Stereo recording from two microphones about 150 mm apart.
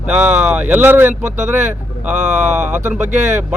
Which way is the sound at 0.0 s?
10° right (ahead or behind).